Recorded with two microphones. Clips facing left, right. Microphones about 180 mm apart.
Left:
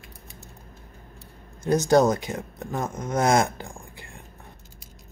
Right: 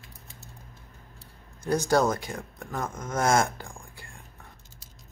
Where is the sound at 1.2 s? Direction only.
20° left (ahead or behind).